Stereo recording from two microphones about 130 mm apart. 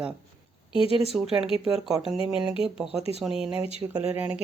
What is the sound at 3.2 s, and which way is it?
Speech, 5° right (ahead or behind).